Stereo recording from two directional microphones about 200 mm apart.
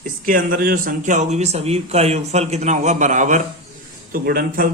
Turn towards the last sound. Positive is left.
turn(degrees=-45)  # may be behind; listen again after turning